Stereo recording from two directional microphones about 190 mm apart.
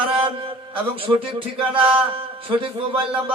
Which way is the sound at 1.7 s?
30° right (ahead or behind).